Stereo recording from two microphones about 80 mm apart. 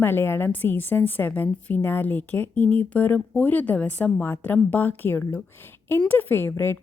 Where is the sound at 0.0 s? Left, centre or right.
Left.